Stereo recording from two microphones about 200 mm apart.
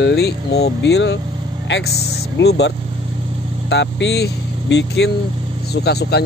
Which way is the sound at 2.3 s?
55° left (ahead or behind).